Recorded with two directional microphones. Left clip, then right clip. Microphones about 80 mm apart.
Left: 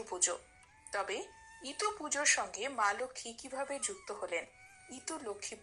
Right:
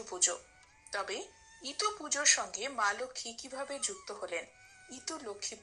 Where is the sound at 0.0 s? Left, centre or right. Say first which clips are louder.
Right 2 dB; right.